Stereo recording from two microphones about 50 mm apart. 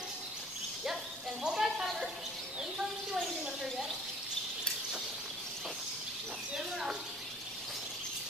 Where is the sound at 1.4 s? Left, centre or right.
Centre.